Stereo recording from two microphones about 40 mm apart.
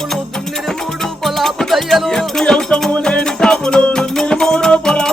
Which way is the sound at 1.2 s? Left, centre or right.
Centre.